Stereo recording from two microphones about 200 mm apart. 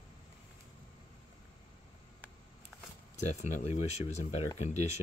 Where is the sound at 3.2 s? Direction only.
35° left (ahead or behind).